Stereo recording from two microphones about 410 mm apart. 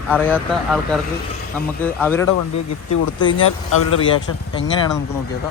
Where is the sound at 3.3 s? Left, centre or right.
Left.